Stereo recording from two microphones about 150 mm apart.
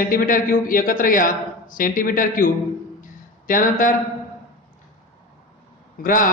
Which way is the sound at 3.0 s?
65° left (ahead or behind).